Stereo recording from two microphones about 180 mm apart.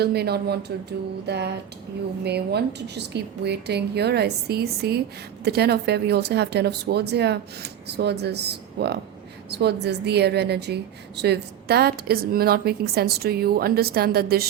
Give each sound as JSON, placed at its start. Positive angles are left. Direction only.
{"t": 0.0, "sound": "a woman's voice", "side_deg": -60}